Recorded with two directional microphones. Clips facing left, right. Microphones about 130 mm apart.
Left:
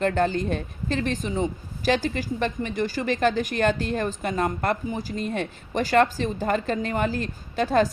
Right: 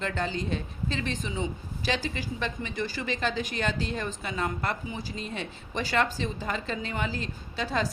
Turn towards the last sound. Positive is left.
turn(degrees=50)  # may be behind; listen again after turning